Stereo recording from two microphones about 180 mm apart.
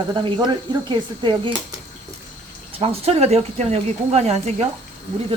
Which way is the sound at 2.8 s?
35° right (ahead or behind).